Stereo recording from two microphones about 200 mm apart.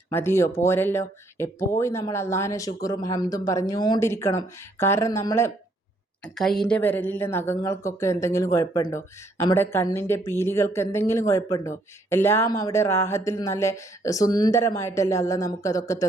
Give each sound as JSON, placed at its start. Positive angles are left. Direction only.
{"t": 0.1, "sound": "a woman's voice", "side_deg": 10}
{"t": 6.2, "sound": "a woman's voice", "side_deg": 0}